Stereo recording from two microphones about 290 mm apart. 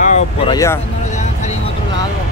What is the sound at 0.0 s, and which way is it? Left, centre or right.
Speech, left.